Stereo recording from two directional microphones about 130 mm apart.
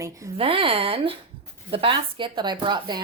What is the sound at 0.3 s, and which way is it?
Speech, 45° right (ahead or behind).